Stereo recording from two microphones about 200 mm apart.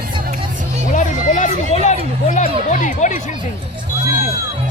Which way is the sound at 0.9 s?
40° left (ahead or behind).